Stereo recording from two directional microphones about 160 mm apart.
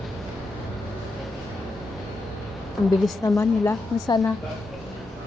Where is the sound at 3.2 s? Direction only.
20° left (ahead or behind).